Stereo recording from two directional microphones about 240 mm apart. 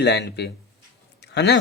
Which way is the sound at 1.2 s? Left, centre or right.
Left.